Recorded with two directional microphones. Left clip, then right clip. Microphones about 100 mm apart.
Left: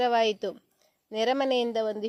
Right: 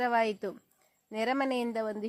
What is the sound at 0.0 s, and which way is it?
A woman's voice, 20° left (ahead or behind).